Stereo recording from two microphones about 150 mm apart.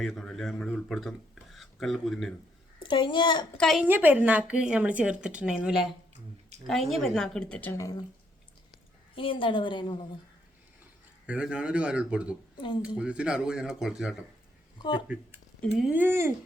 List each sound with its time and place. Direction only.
0.0 s speech: centre (ahead or behind)
2.7 s a woman's voice: 35° left (ahead or behind)
3.6 s speech: centre (ahead or behind)
3.8 s speech: 10° right (ahead or behind); by 7.8 s 10° left (ahead or behind)
7.8 s speech: 25° left (ahead or behind)
9.1 s a woman's voice: 35° left (ahead or behind)
11.3 s speech: 10° right (ahead or behind)
14.8 s speech: 30° left (ahead or behind)
15.0 s speech: 5° right (ahead or behind)